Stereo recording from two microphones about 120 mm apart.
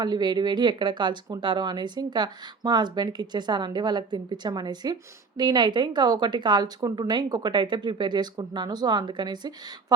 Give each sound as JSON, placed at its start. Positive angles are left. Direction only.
{"t": 0.0, "sound": "speech", "side_deg": -35}